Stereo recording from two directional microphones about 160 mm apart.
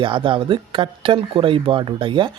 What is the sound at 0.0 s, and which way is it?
Speech, 30° right (ahead or behind).